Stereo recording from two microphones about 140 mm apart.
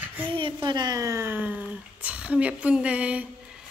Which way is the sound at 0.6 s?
30° right (ahead or behind).